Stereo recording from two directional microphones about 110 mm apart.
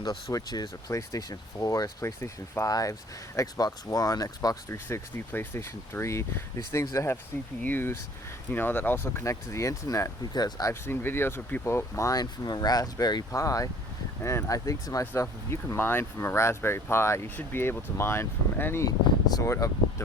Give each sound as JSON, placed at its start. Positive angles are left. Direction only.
{"t": 0.0, "sound": "speech", "side_deg": 35}
{"t": 18.9, "sound": "speech", "side_deg": 30}